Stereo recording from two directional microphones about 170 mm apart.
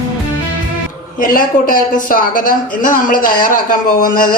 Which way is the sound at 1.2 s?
55° left (ahead or behind).